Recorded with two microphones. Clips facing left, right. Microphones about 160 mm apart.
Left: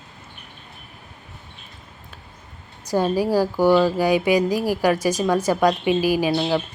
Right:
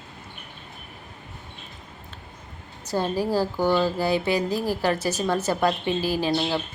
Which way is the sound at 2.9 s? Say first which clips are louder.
Left 4 dB; 10° left (ahead or behind).